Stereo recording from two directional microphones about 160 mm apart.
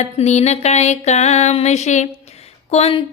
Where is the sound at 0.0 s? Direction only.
45° left (ahead or behind).